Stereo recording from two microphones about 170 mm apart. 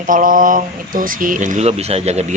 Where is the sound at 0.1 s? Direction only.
55° right (ahead or behind).